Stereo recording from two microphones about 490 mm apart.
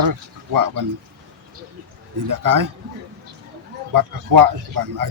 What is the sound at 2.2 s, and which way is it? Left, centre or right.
Speech, right.